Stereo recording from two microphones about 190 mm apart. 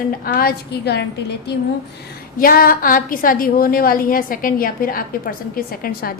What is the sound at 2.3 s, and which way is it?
A woman's voice, 50° left (ahead or behind).